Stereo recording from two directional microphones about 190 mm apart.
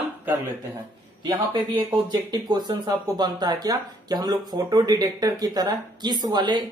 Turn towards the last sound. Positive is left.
turn(degrees=-25)  # may be behind; listen again after turning